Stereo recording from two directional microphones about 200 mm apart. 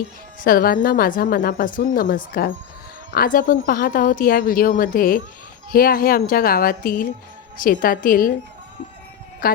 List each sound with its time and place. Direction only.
0.4 s a woman's voice: 45° left (ahead or behind)
9.4 s a woman's voice: 45° left (ahead or behind)